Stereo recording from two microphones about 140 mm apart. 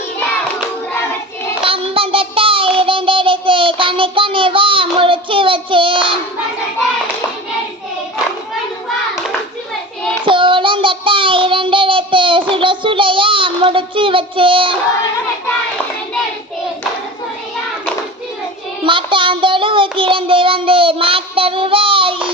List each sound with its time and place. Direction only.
1.6 s child singing: 40° right (ahead or behind)
10.2 s child singing: 35° right (ahead or behind)
18.8 s child singing: 35° right (ahead or behind)